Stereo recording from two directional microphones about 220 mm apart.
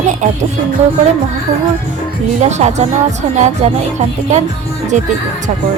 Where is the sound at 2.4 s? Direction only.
30° right (ahead or behind).